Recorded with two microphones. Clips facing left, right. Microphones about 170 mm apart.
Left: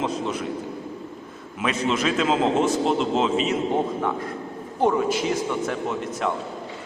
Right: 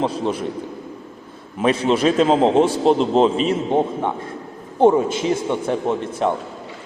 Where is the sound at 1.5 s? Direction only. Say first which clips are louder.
Right 6 dB; 30° right (ahead or behind).